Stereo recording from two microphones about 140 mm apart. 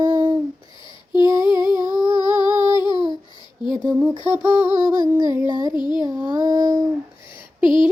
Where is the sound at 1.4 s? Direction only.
30° left (ahead or behind).